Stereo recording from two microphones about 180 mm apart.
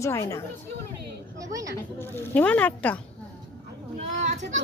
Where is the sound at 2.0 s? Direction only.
10° left (ahead or behind).